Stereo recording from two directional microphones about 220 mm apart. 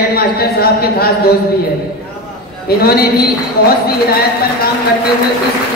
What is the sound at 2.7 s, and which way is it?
Speech, 45° left (ahead or behind).